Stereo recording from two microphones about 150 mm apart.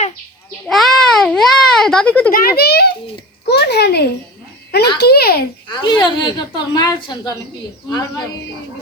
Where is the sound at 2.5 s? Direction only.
90° left.